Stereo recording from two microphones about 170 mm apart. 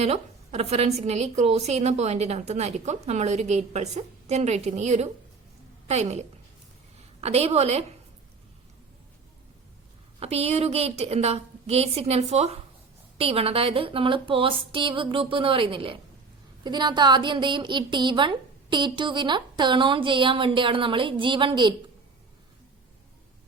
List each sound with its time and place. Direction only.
0.0 s a woman's voice: 40° right (ahead or behind)
10.2 s a woman's voice: 35° right (ahead or behind)